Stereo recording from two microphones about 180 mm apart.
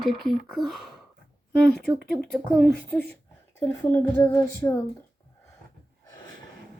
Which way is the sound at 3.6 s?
10° left (ahead or behind).